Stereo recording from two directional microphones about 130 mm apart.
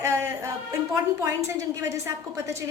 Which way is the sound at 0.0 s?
20° right (ahead or behind).